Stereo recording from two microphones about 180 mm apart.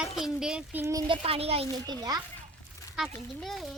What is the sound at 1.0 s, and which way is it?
Speech, 30° right (ahead or behind).